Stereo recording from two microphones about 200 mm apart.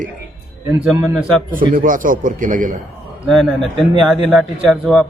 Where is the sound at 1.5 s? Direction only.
45° right (ahead or behind).